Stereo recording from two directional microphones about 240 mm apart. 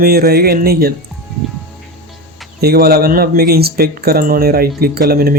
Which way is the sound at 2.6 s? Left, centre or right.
Right.